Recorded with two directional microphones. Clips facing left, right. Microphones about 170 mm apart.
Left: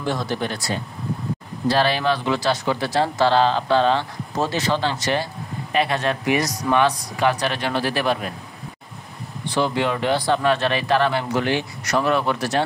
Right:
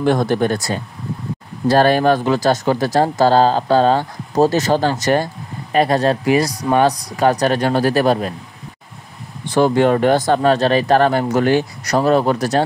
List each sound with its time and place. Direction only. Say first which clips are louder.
0.0 s speech: right 9 dB; 55° right (ahead or behind)
9.5 s speech: right 8 dB; 45° right (ahead or behind)